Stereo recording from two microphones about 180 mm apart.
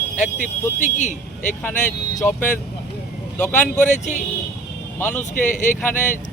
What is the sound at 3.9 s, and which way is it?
Speech, 40° left (ahead or behind).